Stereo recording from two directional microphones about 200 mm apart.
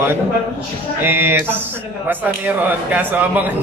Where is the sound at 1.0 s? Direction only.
10° right (ahead or behind).